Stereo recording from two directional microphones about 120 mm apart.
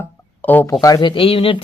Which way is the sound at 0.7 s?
30° left (ahead or behind).